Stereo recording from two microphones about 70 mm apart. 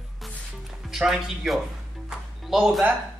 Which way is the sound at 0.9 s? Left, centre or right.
Centre.